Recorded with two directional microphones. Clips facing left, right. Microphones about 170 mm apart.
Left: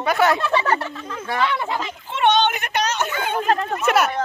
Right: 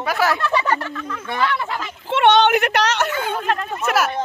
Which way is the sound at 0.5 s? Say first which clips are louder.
Even; 30° left (ahead or behind).